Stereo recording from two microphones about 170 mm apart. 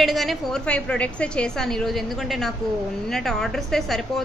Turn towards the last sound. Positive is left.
turn(degrees=0)  # may be behind; listen again after turning